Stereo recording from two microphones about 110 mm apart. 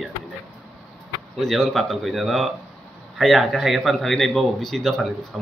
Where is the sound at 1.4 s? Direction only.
5° left (ahead or behind).